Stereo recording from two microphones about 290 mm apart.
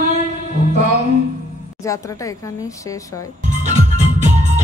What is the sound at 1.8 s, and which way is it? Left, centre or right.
Speech, centre.